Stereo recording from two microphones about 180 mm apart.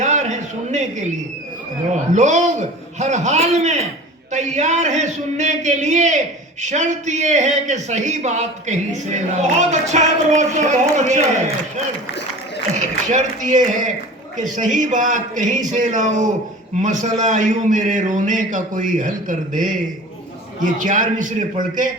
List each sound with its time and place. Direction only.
0.0 s a sound: 40° right (ahead or behind)
2.1 s a man's voice: 40° right (ahead or behind)
12.7 s a man's voice: 40° right (ahead or behind)